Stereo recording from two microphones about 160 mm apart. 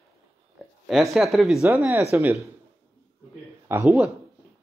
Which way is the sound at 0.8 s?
Centre (ahead or behind).